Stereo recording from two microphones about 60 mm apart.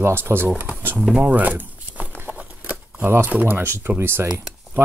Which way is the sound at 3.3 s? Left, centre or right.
Right.